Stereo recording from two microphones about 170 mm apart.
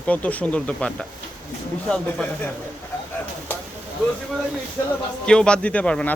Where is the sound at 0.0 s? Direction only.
10° left (ahead or behind).